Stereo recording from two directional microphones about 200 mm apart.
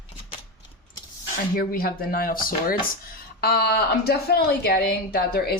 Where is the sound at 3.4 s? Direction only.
50° left (ahead or behind).